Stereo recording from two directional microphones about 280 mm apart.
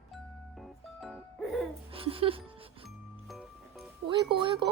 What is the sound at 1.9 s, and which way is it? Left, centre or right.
Speech, centre.